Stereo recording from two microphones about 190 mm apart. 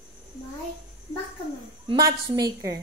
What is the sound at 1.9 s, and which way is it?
Speech, 20° right (ahead or behind).